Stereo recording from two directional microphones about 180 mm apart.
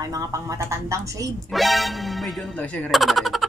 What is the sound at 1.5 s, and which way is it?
Speech, centre (ahead or behind).